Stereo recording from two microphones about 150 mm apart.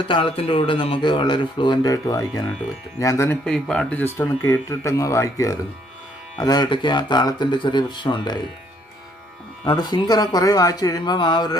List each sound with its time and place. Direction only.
0.0 s speech: 35° left (ahead or behind)
3.4 s speech: 5° left (ahead or behind); by 8.4 s 30° left (ahead or behind)
9.6 s speech: 30° left (ahead or behind)